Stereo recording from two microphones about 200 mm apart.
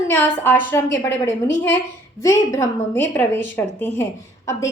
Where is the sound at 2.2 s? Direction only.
15° left (ahead or behind).